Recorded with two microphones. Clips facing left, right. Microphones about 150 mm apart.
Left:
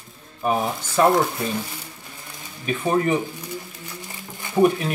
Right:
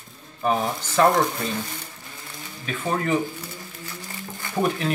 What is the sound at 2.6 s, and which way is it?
Speech, 15° left (ahead or behind).